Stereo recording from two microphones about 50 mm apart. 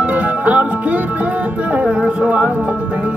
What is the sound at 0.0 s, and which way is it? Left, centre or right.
Music, right.